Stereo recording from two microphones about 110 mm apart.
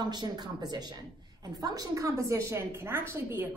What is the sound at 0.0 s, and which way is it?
A woman's voice, 40° right (ahead or behind).